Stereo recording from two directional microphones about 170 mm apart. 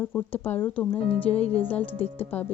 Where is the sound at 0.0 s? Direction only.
10° left (ahead or behind).